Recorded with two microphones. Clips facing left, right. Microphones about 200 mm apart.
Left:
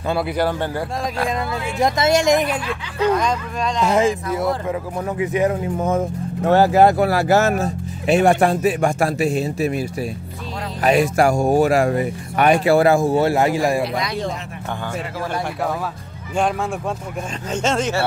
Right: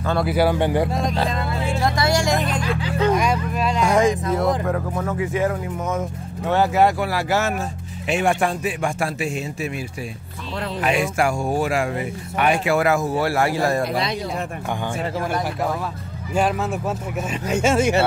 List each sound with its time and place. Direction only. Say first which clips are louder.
0.3 s speech: right 3 dB; 10° right (ahead or behind)
1.3 s music: even; 20° left (ahead or behind)
3.1 s speech: left 2 dB; 10° right (ahead or behind)
4.9 s music: left 2 dB; 20° left (ahead or behind)
5.8 s speech: left 5 dB; 30° left (ahead or behind); by 13.8 s 15° left (ahead or behind)
17.5 s speech: right 2 dB; 10° right (ahead or behind)